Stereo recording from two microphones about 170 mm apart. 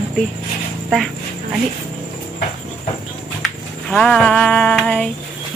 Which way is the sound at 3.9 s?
5° left (ahead or behind).